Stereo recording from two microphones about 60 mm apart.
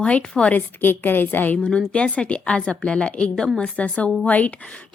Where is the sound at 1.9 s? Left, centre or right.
Centre.